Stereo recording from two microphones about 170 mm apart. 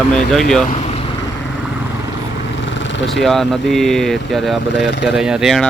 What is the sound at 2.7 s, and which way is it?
Vehicle, 90° left.